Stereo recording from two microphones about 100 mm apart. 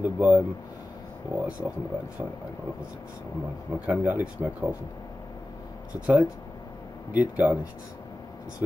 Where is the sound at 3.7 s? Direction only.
15° right (ahead or behind).